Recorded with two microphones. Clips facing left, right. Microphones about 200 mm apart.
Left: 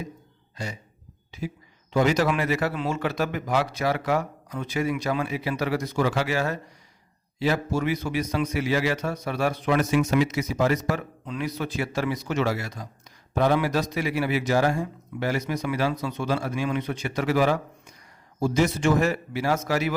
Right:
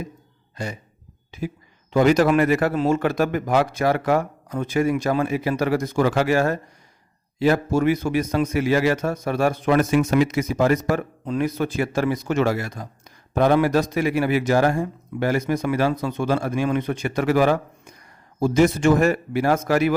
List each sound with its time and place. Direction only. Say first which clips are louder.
0.5 s a man's voice: right 4 dB; 55° right (ahead or behind)